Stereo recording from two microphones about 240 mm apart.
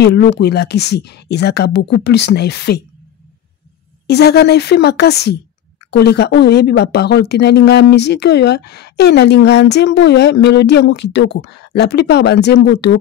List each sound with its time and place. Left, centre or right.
0.0 s speech: left
4.1 s speech: left